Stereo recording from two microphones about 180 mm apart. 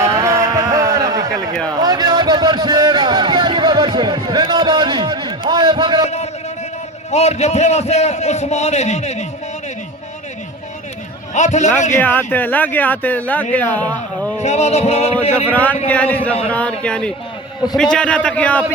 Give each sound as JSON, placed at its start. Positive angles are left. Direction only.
{"t": 0.0, "sound": "a sound", "side_deg": -15}
{"t": 7.1, "sound": "a man's voice", "side_deg": 40}
{"t": 11.3, "sound": "a man's voice", "side_deg": 40}
{"t": 11.9, "sound": "speech", "side_deg": 10}
{"t": 14.4, "sound": "a man's voice", "side_deg": 40}
{"t": 15.5, "sound": "speech", "side_deg": 10}